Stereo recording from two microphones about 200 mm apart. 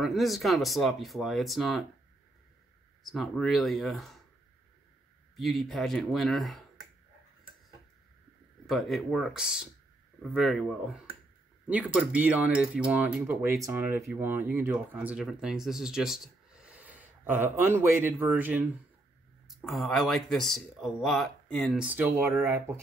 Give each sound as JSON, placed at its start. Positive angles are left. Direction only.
{"t": 0.0, "sound": "speech", "side_deg": 0}
{"t": 3.0, "sound": "speech", "side_deg": 0}
{"t": 5.3, "sound": "speech", "side_deg": 0}
{"t": 8.6, "sound": "speech", "side_deg": 0}
{"t": 21.8, "sound": "speech", "side_deg": -10}